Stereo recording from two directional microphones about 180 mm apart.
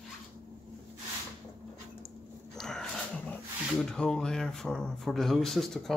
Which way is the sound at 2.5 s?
5° left (ahead or behind).